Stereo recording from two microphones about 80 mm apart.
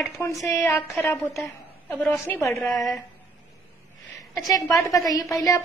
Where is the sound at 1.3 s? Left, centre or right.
Centre.